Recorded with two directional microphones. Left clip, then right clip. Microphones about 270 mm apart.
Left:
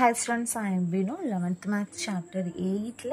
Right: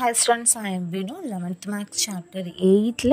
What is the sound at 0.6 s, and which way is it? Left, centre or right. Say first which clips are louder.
Speech: right 2 dB; right.